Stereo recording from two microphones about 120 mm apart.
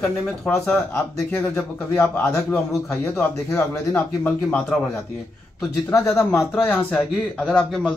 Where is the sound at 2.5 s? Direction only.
5° left (ahead or behind).